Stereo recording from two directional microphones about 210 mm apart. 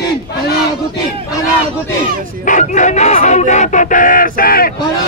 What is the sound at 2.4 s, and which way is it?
Speech, 35° left (ahead or behind).